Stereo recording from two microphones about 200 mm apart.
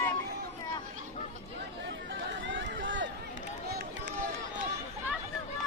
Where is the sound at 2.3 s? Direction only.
65° right (ahead or behind).